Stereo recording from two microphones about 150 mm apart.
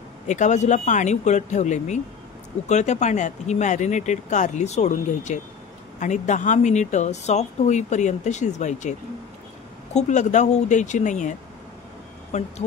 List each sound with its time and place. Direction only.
0.3 s a woman's voice: 50° left (ahead or behind)
9.9 s a woman's voice: 50° left (ahead or behind)